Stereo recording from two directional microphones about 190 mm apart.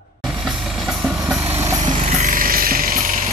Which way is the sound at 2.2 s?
45° right (ahead or behind).